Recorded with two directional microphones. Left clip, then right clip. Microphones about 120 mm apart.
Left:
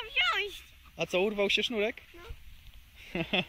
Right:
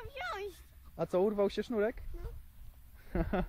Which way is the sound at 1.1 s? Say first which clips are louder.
Left 3 dB; 45° left (ahead or behind).